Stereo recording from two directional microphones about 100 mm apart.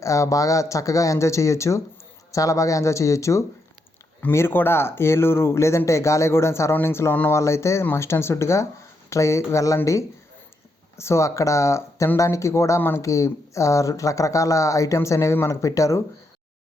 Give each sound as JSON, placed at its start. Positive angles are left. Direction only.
{"t": 0.0, "sound": "speech", "side_deg": 30}